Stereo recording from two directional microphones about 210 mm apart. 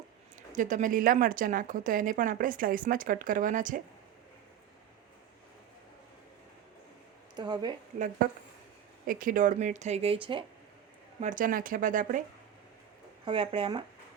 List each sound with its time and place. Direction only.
0.5 s a woman's voice: 35° right (ahead or behind)
7.3 s speech: 20° right (ahead or behind)
9.0 s a woman's voice: 40° right (ahead or behind); by 10.4 s 25° right (ahead or behind)
11.2 s a woman's voice: 40° right (ahead or behind)
13.2 s speech: 25° right (ahead or behind)